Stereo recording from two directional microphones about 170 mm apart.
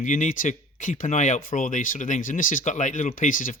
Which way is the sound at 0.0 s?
50° left (ahead or behind).